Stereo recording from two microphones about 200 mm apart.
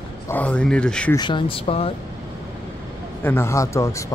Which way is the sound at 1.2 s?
25° left (ahead or behind).